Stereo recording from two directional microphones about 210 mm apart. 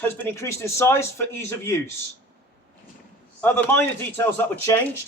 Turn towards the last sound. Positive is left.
turn(degrees=10)  # may be behind; listen again after turning